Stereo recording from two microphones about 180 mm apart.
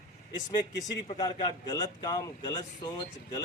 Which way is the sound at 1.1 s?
25° left (ahead or behind).